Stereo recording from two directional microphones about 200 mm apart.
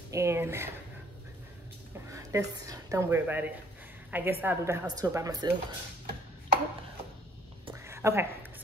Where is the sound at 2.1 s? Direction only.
15° right (ahead or behind).